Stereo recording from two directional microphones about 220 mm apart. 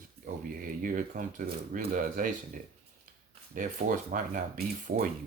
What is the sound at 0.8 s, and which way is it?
Speech, 40° right (ahead or behind).